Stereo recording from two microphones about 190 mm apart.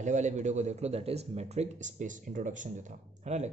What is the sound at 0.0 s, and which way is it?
Speech, 40° right (ahead or behind).